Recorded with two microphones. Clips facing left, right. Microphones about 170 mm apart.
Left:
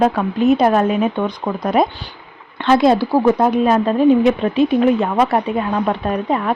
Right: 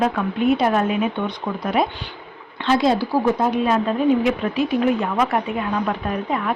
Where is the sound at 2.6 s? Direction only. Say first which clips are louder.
Left 5 dB; 55° left (ahead or behind).